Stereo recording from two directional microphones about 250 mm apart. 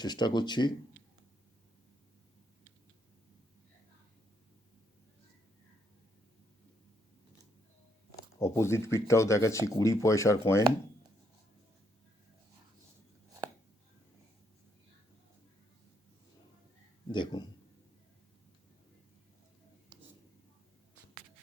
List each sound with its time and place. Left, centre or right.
0.0 s speech: centre
8.1 s speech: centre
17.1 s speech: centre